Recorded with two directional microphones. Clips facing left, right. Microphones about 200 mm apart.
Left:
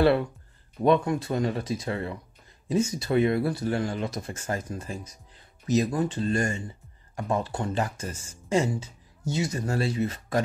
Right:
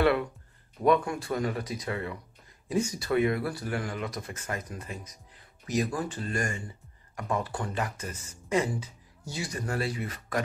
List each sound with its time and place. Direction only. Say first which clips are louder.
0.8 s speech: left 2 dB; 25° left (ahead or behind)